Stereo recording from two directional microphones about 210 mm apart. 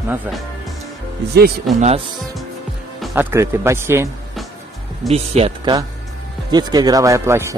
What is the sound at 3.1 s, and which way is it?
Speech, 10° right (ahead or behind).